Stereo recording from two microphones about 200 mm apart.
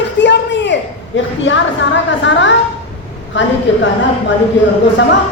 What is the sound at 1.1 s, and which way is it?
A woman's voice, 65° left (ahead or behind).